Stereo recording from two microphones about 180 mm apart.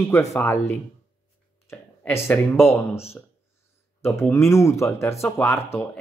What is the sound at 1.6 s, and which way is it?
Speech, 10° left (ahead or behind).